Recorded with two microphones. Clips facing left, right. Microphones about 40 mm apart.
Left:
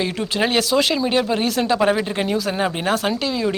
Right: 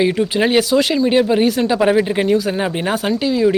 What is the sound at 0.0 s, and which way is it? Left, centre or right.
Speech, centre.